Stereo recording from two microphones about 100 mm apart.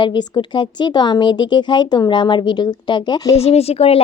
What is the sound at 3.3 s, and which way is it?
Speech, 90° left.